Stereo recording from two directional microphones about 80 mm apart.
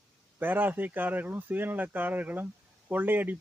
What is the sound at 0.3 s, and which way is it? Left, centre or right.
Speech, right.